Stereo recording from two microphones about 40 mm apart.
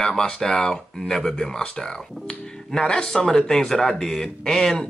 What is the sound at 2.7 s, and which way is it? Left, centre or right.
Speech, centre.